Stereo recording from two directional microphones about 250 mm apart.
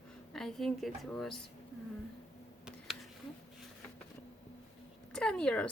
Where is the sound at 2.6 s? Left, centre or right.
Centre.